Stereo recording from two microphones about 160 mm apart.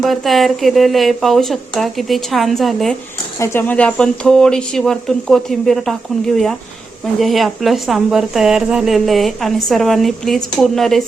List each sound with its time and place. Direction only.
0.0 s speech: centre (ahead or behind)
3.3 s speech: 15° left (ahead or behind)